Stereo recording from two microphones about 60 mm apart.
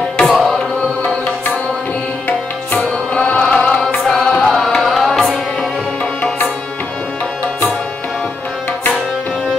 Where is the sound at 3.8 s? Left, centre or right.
Centre.